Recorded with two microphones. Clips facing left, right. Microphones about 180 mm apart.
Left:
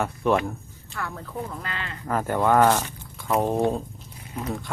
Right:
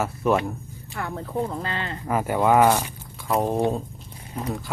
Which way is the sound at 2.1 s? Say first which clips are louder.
Right 1 dB; 10° right (ahead or behind).